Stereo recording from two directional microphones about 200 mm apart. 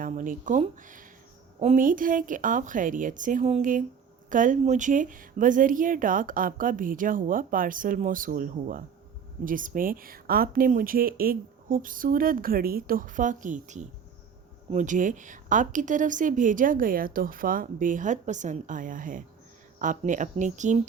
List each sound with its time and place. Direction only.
0.0 s speech: 40° right (ahead or behind)